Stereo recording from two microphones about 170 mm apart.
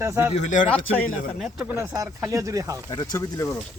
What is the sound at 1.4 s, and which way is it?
Speech, 10° right (ahead or behind).